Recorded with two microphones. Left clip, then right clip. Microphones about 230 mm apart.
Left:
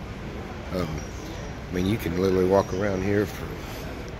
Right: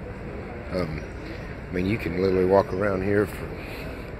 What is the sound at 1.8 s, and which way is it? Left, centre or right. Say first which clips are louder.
Speech: even; centre.